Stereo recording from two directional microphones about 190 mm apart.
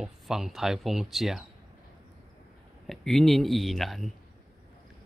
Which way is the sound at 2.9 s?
Centre (ahead or behind).